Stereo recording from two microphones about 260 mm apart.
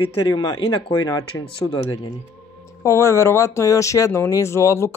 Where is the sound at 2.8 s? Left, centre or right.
Centre.